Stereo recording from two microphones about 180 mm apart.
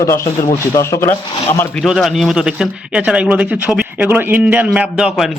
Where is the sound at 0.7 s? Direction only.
15° left (ahead or behind).